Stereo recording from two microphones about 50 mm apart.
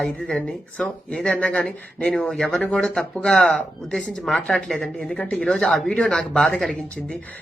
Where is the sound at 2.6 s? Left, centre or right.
Left.